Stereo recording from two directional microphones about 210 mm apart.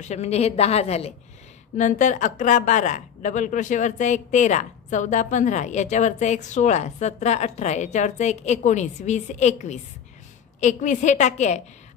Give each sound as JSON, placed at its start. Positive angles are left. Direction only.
{"t": 0.0, "sound": "a woman's voice", "side_deg": 30}